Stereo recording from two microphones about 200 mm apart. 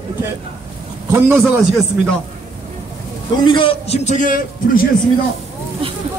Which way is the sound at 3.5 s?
25° left (ahead or behind).